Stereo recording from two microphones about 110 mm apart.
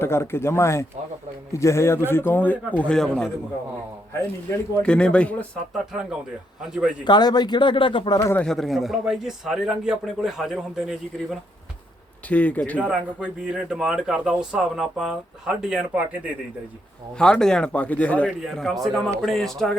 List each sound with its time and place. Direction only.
0.0 s a man's voice: 25° left (ahead or behind); by 3.3 s 5° left (ahead or behind)
4.8 s a man's voice: 10° left (ahead or behind)
5.7 s a man's voice: 5° right (ahead or behind)
7.0 s speech: 40° left (ahead or behind)
8.4 s a man's voice: centre (ahead or behind)
12.3 s a man's voice: 15° left (ahead or behind)
12.8 s speech: 10° right (ahead or behind)
17.2 s a man's voice: 5° left (ahead or behind)
18.3 s a man's voice: centre (ahead or behind)